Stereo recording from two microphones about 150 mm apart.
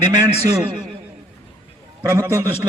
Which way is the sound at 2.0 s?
20° right (ahead or behind).